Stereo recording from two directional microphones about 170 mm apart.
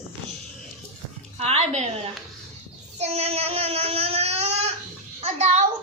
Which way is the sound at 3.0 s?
40° right (ahead or behind).